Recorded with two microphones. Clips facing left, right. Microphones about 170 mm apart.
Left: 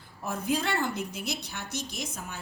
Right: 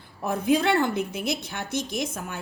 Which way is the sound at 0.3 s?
60° right (ahead or behind).